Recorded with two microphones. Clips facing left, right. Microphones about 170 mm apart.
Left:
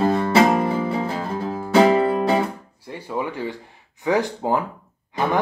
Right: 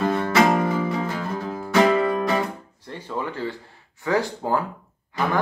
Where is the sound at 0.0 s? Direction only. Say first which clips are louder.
Left 3 dB; 35° left (ahead or behind).